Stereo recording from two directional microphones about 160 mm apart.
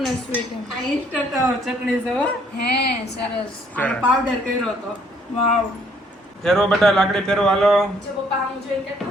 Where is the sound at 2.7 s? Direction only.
90° left.